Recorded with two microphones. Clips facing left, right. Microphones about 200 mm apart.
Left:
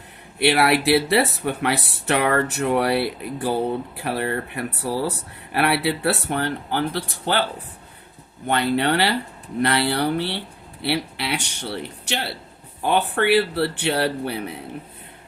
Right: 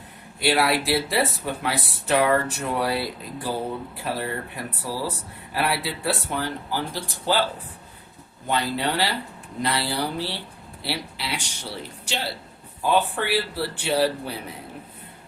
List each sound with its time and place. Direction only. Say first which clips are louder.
0.3 s speech: left 3 dB; 65° left (ahead or behind)
8.4 s speech: left 5 dB; 65° left (ahead or behind)